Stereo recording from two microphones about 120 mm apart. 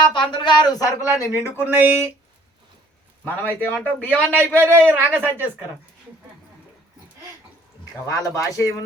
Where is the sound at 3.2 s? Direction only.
15° left (ahead or behind).